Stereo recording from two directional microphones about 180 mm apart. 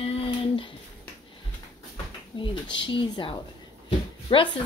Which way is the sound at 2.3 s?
25° left (ahead or behind).